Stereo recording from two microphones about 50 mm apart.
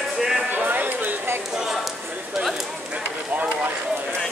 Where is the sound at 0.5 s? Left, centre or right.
Right.